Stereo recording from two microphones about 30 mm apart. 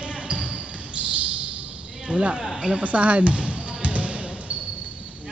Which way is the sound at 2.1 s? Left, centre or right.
Right.